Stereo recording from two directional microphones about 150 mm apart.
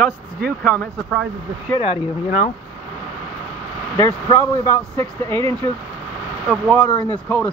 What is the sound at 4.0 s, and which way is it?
Speech, 20° left (ahead or behind).